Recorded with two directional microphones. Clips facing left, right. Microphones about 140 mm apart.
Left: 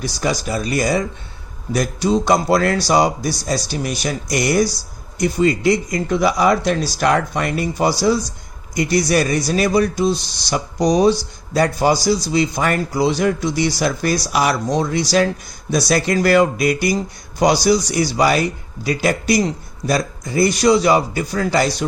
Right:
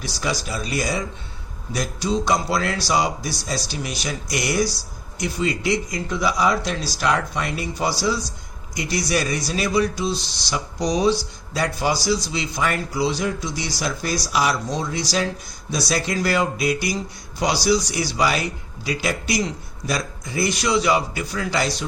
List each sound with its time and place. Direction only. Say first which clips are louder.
0.0 s a man's voice: left 5 dB; 45° left (ahead or behind)